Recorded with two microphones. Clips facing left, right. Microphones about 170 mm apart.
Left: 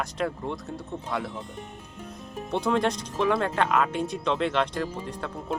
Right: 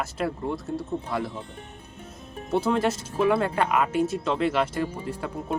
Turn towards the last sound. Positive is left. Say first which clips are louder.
# right 2 dB
turn(degrees=-5)  # may be behind; listen again after turning